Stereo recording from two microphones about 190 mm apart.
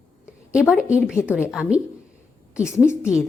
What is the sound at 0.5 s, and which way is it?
A woman's voice, 5° right (ahead or behind).